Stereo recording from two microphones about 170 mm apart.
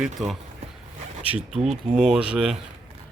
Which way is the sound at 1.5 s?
40° right (ahead or behind).